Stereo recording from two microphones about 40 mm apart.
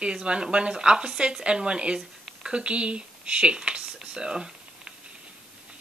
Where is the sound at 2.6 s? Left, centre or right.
Right.